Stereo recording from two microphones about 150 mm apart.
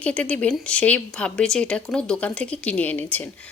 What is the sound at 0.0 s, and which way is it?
A woman's voice, 10° left (ahead or behind).